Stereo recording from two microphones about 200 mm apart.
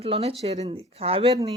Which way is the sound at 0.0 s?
30° right (ahead or behind).